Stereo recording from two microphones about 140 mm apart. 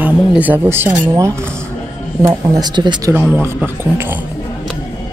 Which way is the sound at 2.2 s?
30° right (ahead or behind).